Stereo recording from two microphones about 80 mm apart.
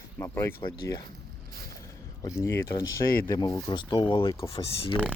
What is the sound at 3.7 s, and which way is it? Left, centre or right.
Speech, left.